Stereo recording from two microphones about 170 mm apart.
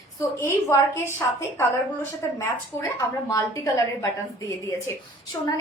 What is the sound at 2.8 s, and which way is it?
A woman's voice, 15° left (ahead or behind).